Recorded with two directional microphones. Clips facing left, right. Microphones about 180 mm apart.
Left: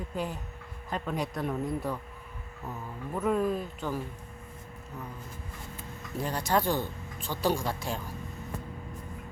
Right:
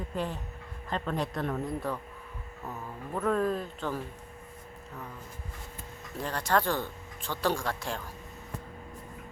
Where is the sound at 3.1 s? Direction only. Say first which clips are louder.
Even; 5° left (ahead or behind).